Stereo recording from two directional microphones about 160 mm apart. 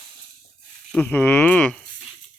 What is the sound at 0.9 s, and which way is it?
Speech, 10° left (ahead or behind).